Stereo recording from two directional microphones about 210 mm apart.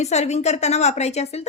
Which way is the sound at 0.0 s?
35° left (ahead or behind).